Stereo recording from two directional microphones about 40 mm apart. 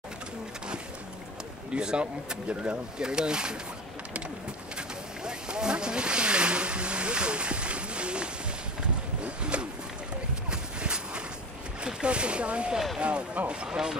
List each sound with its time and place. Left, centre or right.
1.7 s speech: right
3.0 s speech: centre
5.2 s vehicle: right
9.2 s a sound: right
10.5 s clip-clop: right
11.8 s speech: right